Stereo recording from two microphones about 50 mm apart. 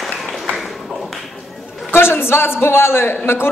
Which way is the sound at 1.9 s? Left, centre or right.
Left.